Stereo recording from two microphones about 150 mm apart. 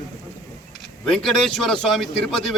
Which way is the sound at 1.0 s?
5° left (ahead or behind).